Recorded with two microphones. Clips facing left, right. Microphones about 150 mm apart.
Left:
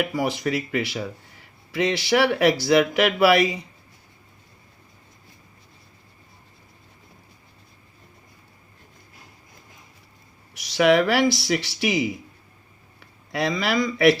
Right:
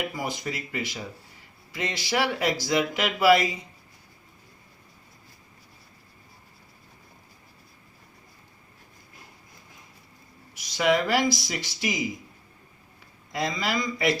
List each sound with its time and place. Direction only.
0.1 s speech: 70° left (ahead or behind)
10.5 s speech: 70° left (ahead or behind)